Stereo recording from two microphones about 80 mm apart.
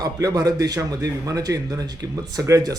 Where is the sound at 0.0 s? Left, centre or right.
Right.